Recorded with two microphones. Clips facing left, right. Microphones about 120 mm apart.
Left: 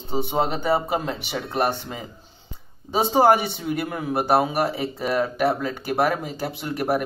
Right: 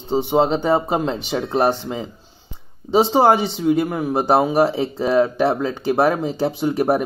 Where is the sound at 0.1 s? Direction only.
20° right (ahead or behind).